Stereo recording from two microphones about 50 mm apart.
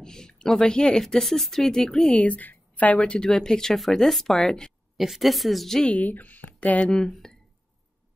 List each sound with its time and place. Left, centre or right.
0.0 s speech: centre
1.0 s a woman's voice: centre
2.1 s a woman's voice: left; by 4.7 s centre
4.9 s a woman's voice: centre
5.9 s speech: left
6.8 s a woman's voice: centre